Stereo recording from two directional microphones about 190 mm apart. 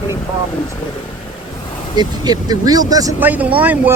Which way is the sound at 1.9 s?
20° right (ahead or behind).